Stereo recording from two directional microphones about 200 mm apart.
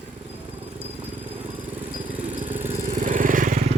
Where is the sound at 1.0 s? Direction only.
10° right (ahead or behind).